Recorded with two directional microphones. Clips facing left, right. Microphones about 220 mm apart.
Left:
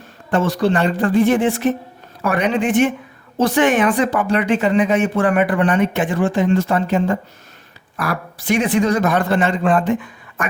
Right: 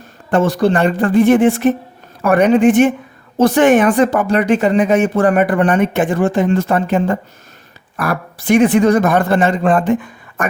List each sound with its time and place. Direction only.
0.3 s speech: 45° right (ahead or behind)